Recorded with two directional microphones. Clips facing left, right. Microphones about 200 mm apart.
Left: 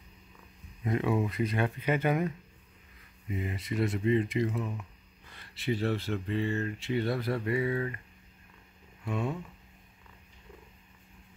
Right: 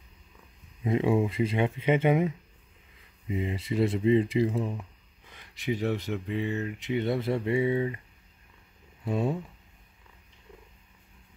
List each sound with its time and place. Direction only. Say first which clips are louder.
0.8 s speech: right 4 dB; 25° right (ahead or behind)
3.3 s speech: right 4 dB; 25° right (ahead or behind)
5.2 s speech: right 1 dB; 15° right (ahead or behind)
9.0 s speech: right 5 dB; 35° right (ahead or behind)